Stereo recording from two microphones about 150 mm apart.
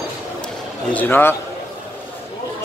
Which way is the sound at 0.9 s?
10° left (ahead or behind).